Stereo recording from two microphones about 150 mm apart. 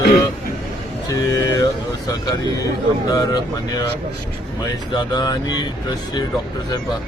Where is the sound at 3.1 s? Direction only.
25° left (ahead or behind).